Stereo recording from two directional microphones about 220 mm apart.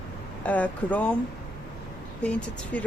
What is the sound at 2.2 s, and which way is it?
Speech, 5° left (ahead or behind).